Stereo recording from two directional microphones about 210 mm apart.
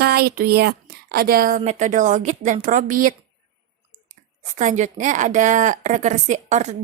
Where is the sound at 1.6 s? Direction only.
35° right (ahead or behind).